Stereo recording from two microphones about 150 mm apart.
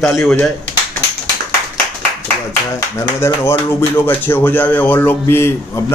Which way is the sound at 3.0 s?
20° left (ahead or behind).